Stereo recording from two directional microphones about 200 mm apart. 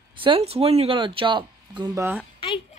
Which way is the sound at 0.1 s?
25° right (ahead or behind).